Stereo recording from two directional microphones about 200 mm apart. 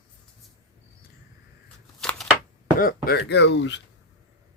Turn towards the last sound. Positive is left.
turn(degrees=65)  # may be behind; listen again after turning